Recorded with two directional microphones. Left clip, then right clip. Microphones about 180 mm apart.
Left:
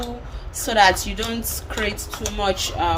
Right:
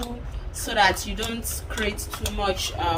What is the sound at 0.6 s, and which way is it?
A woman's voice, 35° left (ahead or behind).